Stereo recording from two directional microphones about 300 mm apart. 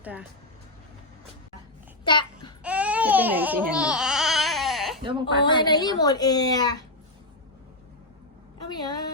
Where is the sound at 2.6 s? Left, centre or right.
Centre.